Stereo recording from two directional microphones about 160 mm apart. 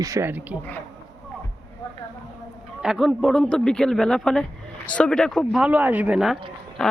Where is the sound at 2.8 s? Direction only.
Centre (ahead or behind).